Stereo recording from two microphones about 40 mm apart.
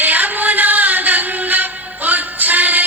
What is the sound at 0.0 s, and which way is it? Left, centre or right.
Music, right.